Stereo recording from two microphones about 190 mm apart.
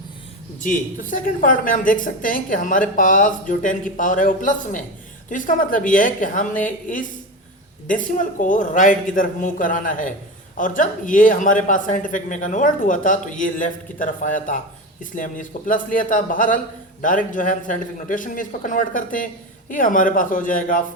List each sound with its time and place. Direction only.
0.6 s speech: 45° left (ahead or behind)